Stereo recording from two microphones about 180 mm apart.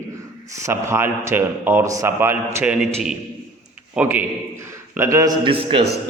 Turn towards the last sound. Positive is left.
turn(degrees=-30)  # may be behind; listen again after turning